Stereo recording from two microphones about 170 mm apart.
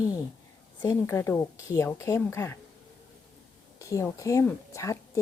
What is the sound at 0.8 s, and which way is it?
A woman's voice, 15° left (ahead or behind).